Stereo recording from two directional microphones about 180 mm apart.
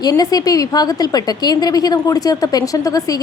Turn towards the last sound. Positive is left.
turn(degrees=20)  # may be behind; listen again after turning